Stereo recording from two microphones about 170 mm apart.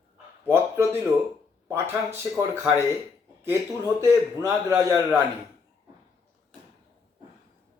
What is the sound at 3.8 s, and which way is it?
A man's voice, 20° right (ahead or behind).